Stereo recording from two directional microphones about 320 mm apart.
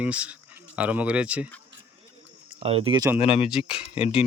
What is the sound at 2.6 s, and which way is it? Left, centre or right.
Speech, centre.